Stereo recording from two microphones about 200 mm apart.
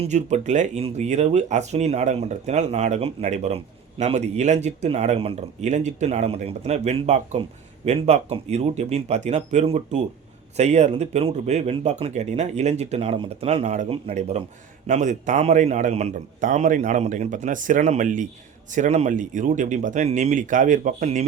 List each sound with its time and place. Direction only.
0.0 s speech: 35° right (ahead or behind)